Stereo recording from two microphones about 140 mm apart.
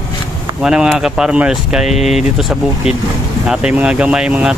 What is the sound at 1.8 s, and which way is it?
Speech, 50° left (ahead or behind).